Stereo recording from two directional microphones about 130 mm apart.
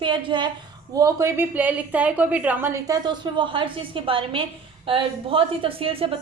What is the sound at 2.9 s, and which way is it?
A woman's voice, 35° right (ahead or behind).